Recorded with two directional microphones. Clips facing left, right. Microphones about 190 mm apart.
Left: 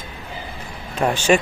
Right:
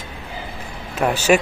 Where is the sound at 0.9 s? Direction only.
5° right (ahead or behind).